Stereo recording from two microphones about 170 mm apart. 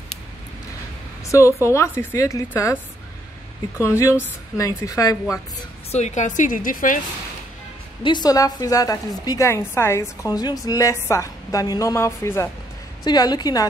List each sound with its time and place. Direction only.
1.2 s a woman's voice: 20° left (ahead or behind)
3.8 s a woman's voice: 15° left (ahead or behind)
5.9 s a woman's voice: 40° left (ahead or behind)
8.0 s a woman's voice: 25° left (ahead or behind)